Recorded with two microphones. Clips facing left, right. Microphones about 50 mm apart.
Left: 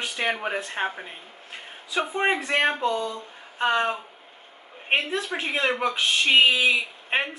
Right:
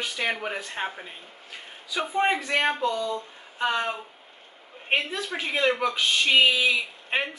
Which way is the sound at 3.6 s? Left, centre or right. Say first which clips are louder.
Left 3 dB; left.